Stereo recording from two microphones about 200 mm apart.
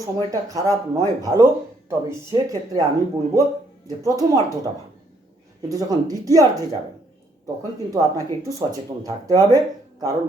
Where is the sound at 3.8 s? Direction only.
15° right (ahead or behind).